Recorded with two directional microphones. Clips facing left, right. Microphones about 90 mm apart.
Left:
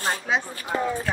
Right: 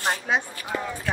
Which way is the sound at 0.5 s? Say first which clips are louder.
Left 4 dB; 35° left (ahead or behind).